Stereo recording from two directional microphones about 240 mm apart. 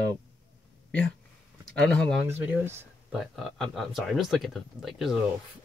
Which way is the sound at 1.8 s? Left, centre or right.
Centre.